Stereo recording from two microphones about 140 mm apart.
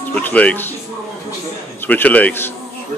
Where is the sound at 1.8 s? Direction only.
10° left (ahead or behind).